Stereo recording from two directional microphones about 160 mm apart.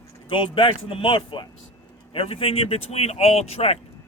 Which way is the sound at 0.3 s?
35° left (ahead or behind).